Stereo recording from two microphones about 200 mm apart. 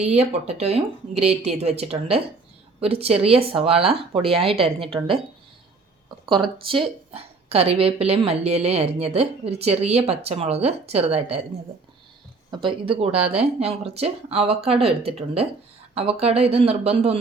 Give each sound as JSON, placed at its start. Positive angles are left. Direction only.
{"t": 0.0, "sound": "a woman's voice", "side_deg": -30}
{"t": 6.2, "sound": "a woman's voice", "side_deg": -25}
{"t": 12.6, "sound": "a woman's voice", "side_deg": -25}